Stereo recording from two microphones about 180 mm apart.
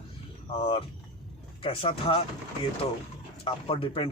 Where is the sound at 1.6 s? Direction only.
30° left (ahead or behind).